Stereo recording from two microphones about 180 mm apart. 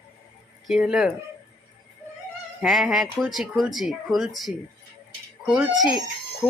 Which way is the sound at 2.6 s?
Centre (ahead or behind).